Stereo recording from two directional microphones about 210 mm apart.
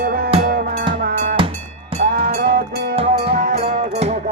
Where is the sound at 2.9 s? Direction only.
30° right (ahead or behind).